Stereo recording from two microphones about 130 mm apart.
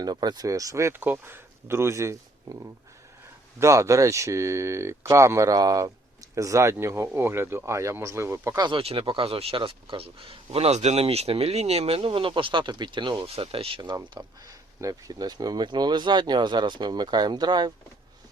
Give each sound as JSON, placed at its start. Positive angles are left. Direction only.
{"t": 0.0, "sound": "speech", "side_deg": -30}
{"t": 8.6, "sound": "speech", "side_deg": -45}
{"t": 13.9, "sound": "speech", "side_deg": -30}